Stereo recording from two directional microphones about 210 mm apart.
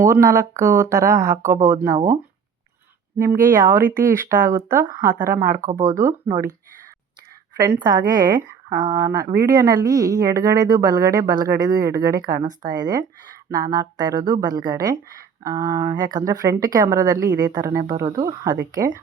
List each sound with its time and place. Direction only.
0.0 s speech: 15° right (ahead or behind)
3.4 s speech: 10° right (ahead or behind)
7.5 s a woman's voice: 15° right (ahead or behind)